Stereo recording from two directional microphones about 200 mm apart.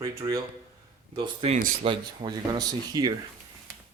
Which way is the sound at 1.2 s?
30° right (ahead or behind).